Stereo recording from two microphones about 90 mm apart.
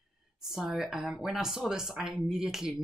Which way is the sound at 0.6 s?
5° right (ahead or behind).